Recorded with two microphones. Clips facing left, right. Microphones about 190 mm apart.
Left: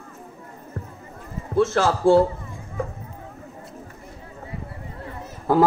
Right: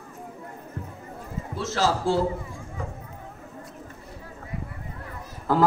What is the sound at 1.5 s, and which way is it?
Speech, 55° left (ahead or behind).